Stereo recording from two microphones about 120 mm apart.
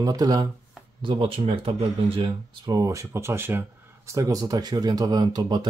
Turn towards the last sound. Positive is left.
turn(degrees=-35)  # may be behind; listen again after turning